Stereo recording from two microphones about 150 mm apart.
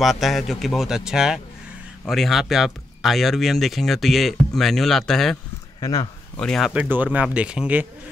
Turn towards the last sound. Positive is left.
turn(degrees=-10)  # may be behind; listen again after turning